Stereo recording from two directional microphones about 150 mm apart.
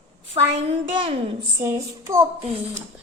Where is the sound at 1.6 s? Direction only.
20° right (ahead or behind).